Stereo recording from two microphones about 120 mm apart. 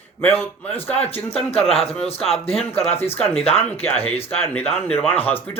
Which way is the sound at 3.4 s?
55° left (ahead or behind).